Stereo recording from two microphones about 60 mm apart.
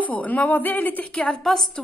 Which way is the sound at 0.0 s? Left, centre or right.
Left.